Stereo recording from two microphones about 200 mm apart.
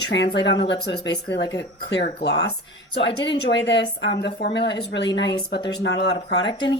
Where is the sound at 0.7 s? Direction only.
60° left (ahead or behind).